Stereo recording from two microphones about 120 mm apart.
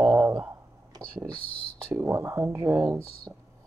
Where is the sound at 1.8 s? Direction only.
20° right (ahead or behind).